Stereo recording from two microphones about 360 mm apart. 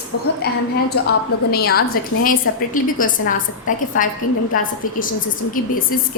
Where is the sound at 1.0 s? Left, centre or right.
Left.